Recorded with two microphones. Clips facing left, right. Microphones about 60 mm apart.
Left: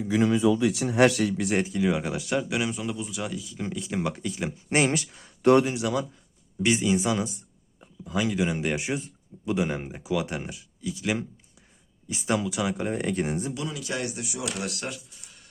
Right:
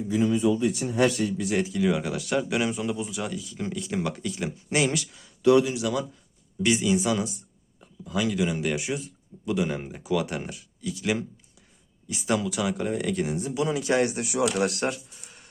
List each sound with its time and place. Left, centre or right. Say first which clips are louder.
0.1 s a man's voice: left 1 dB; left
1.5 s speech: even; left
1.8 s speech: right 1 dB; centre
2.4 s speech: right 2 dB; centre
4.7 s speech: left 1 dB; left
5.7 s speech: even; left
12.9 s speech: even; left
13.7 s a man's voice: right 8 dB; right
14.2 s speech: right 8 dB; right
14.4 s a man's voice: right 8 dB; right